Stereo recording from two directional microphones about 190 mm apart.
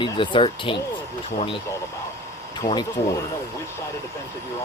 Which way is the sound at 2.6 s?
25° left (ahead or behind).